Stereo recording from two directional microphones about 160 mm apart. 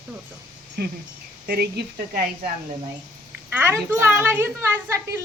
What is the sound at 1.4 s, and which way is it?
Speech, 85° right.